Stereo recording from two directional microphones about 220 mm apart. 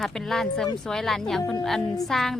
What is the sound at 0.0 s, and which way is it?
A woman's voice, centre (ahead or behind).